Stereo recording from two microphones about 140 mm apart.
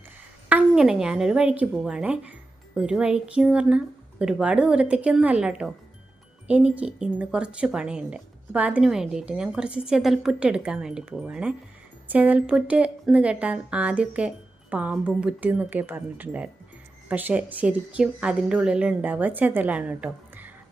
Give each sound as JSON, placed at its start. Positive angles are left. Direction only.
{"t": 0.4, "sound": "a woman's voice", "side_deg": -5}